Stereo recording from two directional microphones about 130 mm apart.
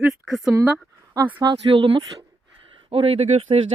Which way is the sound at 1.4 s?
35° right (ahead or behind).